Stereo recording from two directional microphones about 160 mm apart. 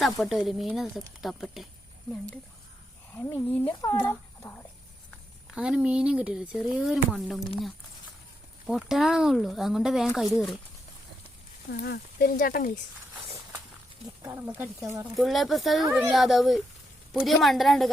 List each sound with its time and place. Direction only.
0.0 s speech: centre (ahead or behind)
3.2 s speech: 15° left (ahead or behind)
5.5 s speech: 5° right (ahead or behind)
8.6 s speech: centre (ahead or behind)
11.7 s speech: 90° left; by 12.7 s 65° left (ahead or behind)
14.2 s speech: 15° right (ahead or behind)
15.1 s speech: centre (ahead or behind)